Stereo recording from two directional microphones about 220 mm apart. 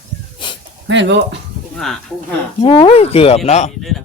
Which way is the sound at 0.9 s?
55° right (ahead or behind).